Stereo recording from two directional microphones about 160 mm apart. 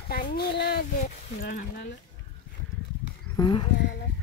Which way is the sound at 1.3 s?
65° left (ahead or behind).